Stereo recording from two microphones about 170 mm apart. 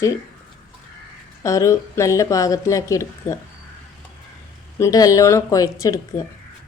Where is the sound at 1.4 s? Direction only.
20° left (ahead or behind).